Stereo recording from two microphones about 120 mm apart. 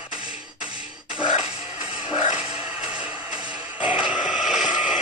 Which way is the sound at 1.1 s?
45° left (ahead or behind).